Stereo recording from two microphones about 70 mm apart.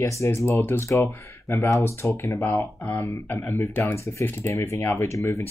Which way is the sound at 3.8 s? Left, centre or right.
Left.